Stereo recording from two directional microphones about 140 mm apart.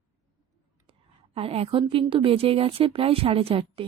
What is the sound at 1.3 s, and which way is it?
A woman's voice, 45° right (ahead or behind).